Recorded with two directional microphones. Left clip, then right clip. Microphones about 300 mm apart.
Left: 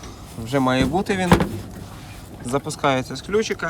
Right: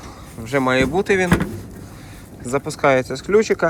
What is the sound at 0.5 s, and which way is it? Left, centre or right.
Speech, centre.